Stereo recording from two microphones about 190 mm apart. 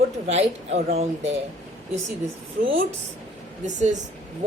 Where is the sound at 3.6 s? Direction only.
40° right (ahead or behind).